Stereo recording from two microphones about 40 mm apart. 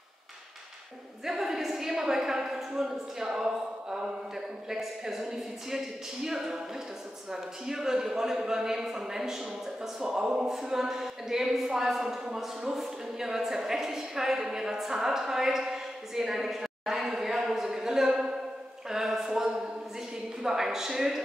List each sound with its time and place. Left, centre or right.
1.2 s a woman's voice: centre
7.6 s a woman's voice: centre
12.3 s a woman's voice: centre